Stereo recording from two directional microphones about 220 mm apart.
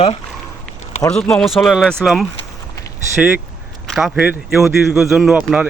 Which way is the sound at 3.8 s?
Centre (ahead or behind).